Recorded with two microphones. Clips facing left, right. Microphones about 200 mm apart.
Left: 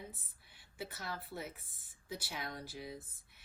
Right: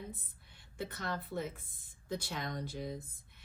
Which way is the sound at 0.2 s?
5° left (ahead or behind).